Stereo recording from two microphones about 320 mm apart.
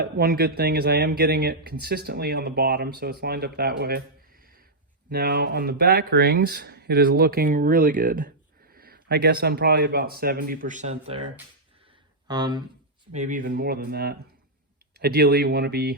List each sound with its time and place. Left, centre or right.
0.0 s speech: right
5.0 s speech: right
12.3 s speech: centre
13.1 s speech: right